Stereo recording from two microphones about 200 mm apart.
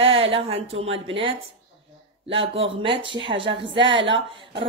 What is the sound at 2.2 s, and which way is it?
A woman's voice, 30° right (ahead or behind).